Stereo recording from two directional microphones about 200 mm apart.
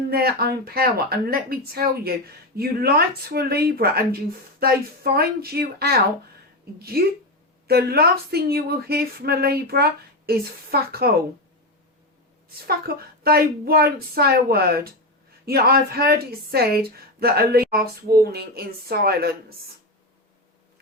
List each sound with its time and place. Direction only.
0.1 s a woman's voice: 50° right (ahead or behind)
12.9 s a woman's voice: 50° right (ahead or behind)